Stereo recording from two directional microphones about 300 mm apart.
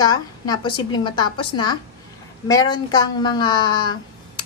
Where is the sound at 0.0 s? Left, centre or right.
Centre.